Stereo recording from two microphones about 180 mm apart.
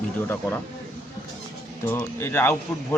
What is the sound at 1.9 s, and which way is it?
Speech, 10° left (ahead or behind).